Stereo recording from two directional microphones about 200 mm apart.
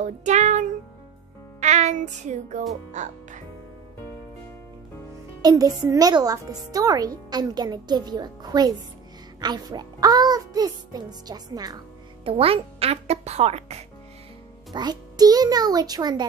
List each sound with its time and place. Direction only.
0.0 s music: 35° right (ahead or behind)
1.6 s a child's voice: 35° right (ahead or behind)
5.4 s a child's voice: 20° right (ahead or behind)
14.7 s a child's voice: 20° right (ahead or behind)